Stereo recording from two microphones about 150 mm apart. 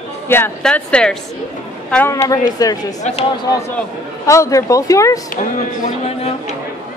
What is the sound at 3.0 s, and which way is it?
Speech, 50° left (ahead or behind).